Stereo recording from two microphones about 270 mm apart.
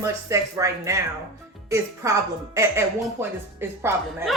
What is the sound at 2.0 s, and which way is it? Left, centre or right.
A woman's voice, centre.